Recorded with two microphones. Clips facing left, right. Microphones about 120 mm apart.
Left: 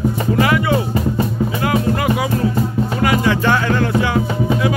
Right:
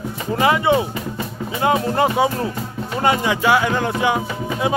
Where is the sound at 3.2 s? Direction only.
15° right (ahead or behind).